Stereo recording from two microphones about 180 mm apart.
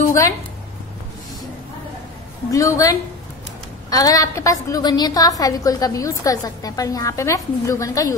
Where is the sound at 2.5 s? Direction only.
20° left (ahead or behind).